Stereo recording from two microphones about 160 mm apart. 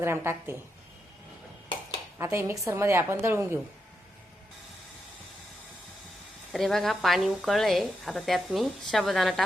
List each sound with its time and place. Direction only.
0.0 s a woman's voice: 15° right (ahead or behind)
2.1 s a woman's voice: 15° right (ahead or behind)
6.5 s a woman's voice: centre (ahead or behind)